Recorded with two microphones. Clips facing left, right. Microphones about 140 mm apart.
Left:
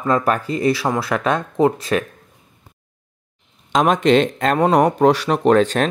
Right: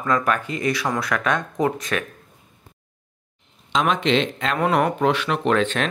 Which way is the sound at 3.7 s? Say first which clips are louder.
Left 6 dB; 45° left (ahead or behind).